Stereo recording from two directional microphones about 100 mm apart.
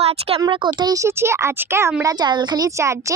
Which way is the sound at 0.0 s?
85° right.